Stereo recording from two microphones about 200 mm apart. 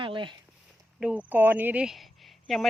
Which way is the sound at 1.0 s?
5° right (ahead or behind).